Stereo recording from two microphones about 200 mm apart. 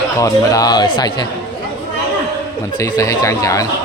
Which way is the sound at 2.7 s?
15° left (ahead or behind).